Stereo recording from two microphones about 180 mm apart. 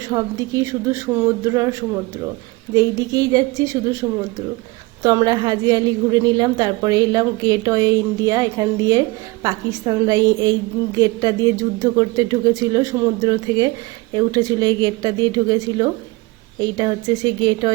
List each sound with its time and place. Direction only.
0.1 s a woman's voice: 20° right (ahead or behind)
2.7 s a woman's voice: 20° right (ahead or behind)